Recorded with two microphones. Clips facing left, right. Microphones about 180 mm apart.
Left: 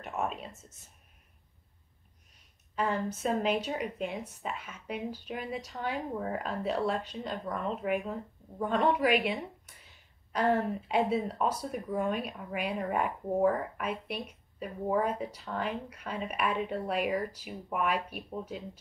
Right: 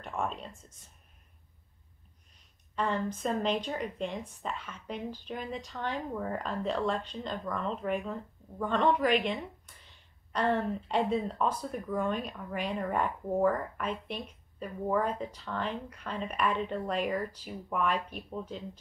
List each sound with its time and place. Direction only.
0.0 s speech: 5° left (ahead or behind)
2.7 s a woman's voice: 5° left (ahead or behind)
9.8 s a sound: 10° left (ahead or behind)
10.7 s speech: 10° left (ahead or behind)